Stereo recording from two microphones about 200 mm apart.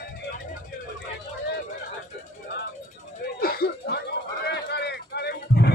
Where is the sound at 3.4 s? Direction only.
50° left (ahead or behind).